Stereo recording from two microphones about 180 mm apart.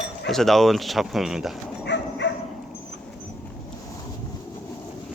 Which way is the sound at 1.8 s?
75° left (ahead or behind).